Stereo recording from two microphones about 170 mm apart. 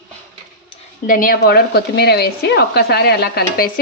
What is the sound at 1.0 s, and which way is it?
Speech, 55° left (ahead or behind).